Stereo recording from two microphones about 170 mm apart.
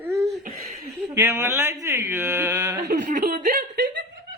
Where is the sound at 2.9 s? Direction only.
50° right (ahead or behind).